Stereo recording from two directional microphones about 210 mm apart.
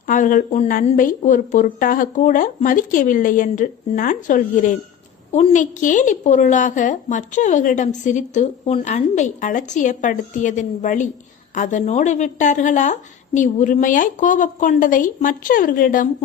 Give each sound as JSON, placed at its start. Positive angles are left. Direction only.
{"t": 0.1, "sound": "a woman's voice", "side_deg": 40}